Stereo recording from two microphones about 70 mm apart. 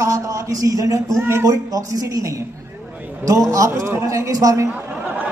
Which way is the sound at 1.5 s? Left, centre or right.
Right.